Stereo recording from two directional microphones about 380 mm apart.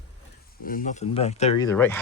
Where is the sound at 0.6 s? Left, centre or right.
Left; by 2.0 s centre.